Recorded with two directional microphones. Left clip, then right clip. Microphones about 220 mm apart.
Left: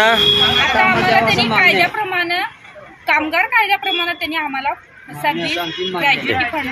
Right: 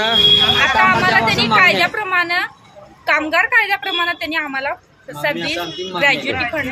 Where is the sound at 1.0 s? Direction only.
15° right (ahead or behind).